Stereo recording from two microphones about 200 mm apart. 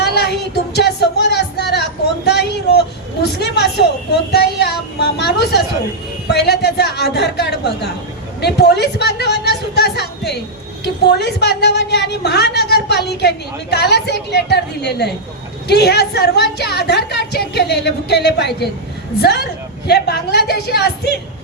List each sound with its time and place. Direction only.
0.0 s a sound: 55° left (ahead or behind)
10.8 s a woman's voice: 55° left (ahead or behind)
19.9 s a woman's voice: 55° left (ahead or behind)